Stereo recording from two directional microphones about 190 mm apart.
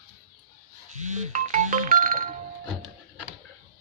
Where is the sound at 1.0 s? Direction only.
40° right (ahead or behind).